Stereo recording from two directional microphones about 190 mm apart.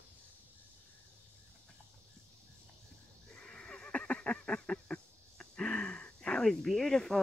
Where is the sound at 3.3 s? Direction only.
5° left (ahead or behind).